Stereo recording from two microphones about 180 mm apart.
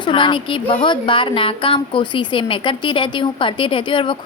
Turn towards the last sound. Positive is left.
turn(degrees=30)  # may be behind; listen again after turning